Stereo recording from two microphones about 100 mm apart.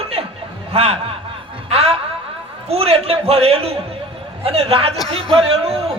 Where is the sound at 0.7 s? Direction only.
80° right.